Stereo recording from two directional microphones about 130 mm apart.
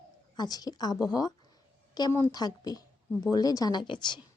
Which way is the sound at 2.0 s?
25° left (ahead or behind).